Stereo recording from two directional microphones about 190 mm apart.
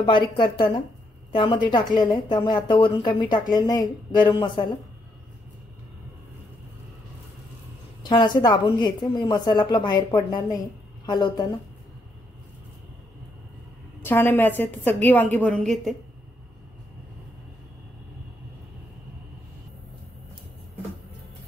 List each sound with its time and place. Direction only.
0.0 s a woman's voice: 25° left (ahead or behind)
8.0 s a woman's voice: 25° left (ahead or behind)
14.0 s a woman's voice: 10° left (ahead or behind)